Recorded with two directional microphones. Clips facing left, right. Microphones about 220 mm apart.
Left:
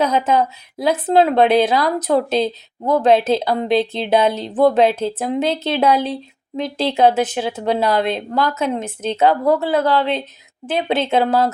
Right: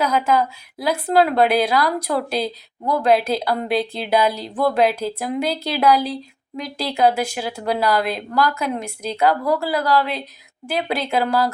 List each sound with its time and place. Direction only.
0.0 s a woman's voice: 25° left (ahead or behind)